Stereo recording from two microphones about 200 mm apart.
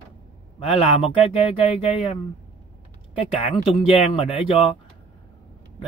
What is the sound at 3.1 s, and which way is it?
Speech, 30° left (ahead or behind).